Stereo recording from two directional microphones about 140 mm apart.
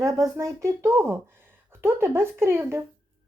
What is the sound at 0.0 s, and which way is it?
Speech, 20° right (ahead or behind).